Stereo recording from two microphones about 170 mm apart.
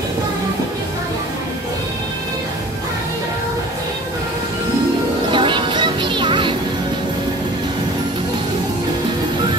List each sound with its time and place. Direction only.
5.3 s music: 30° right (ahead or behind)